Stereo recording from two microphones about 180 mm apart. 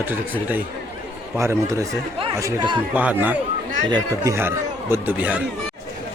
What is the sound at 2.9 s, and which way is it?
Speech, 10° right (ahead or behind).